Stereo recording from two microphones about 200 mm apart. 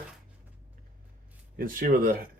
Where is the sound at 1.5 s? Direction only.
45° right (ahead or behind).